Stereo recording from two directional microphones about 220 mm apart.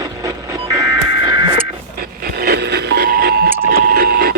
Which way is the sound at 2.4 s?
45° right (ahead or behind).